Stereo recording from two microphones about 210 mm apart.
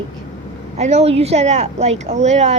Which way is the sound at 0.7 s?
30° right (ahead or behind).